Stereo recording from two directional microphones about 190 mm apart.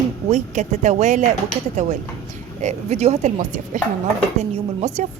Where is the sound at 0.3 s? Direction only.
40° right (ahead or behind).